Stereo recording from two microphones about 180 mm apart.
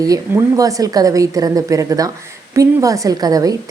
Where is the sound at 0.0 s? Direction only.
20° right (ahead or behind).